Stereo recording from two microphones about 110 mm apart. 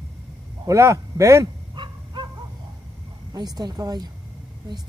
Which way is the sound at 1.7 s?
45° right (ahead or behind).